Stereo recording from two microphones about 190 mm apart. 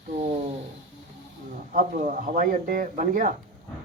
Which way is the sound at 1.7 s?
40° right (ahead or behind).